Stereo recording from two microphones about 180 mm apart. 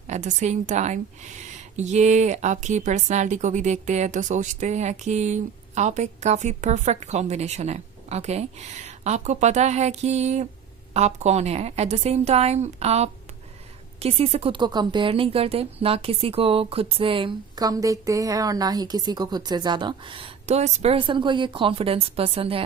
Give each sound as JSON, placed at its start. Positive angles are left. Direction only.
{"t": 0.1, "sound": "a woman's voice", "side_deg": -40}